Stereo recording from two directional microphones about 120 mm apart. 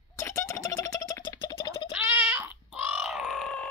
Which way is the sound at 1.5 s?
40° left (ahead or behind).